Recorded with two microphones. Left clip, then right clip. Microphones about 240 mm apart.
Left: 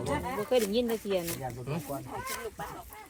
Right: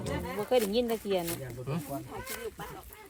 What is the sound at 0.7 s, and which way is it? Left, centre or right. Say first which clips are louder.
Speech: even; right.